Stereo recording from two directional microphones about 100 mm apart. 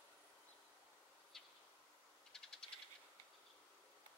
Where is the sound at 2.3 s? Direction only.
5° left (ahead or behind).